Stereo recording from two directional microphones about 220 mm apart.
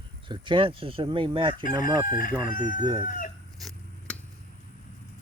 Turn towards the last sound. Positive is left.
turn(degrees=0)  # may be behind; listen again after turning